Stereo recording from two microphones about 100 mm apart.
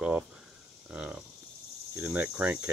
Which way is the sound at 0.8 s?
10° right (ahead or behind).